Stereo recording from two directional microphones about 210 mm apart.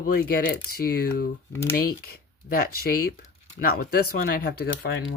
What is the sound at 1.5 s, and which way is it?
Speech, 10° left (ahead or behind).